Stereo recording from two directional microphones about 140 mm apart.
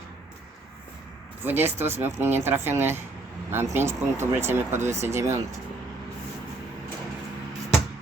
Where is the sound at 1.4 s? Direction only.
15° right (ahead or behind).